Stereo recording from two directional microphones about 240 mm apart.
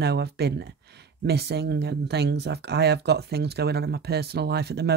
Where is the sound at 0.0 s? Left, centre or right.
Right.